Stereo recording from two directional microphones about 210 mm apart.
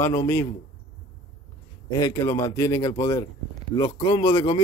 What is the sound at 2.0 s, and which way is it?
Speech, 15° left (ahead or behind).